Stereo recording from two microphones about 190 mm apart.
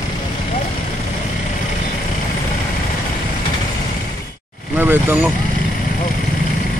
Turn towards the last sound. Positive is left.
turn(degrees=-10)  # may be behind; listen again after turning